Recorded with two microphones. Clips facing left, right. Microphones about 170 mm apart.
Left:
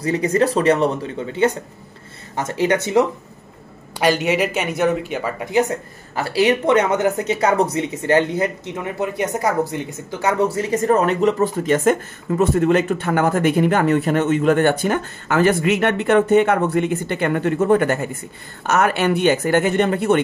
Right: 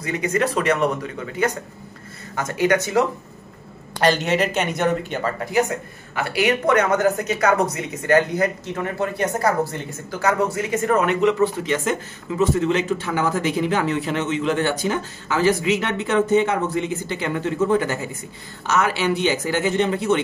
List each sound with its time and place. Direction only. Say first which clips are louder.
0.0 s a woman's voice: left 4 dB; 35° left (ahead or behind)
4.0 s speech: left 1 dB; 10° left (ahead or behind)
5.4 s a woman's voice: left 4 dB; 25° left (ahead or behind); by 20.2 s 55° left (ahead or behind)